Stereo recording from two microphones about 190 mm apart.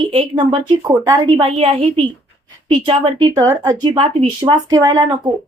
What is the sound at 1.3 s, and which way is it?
A woman's voice, 30° right (ahead or behind).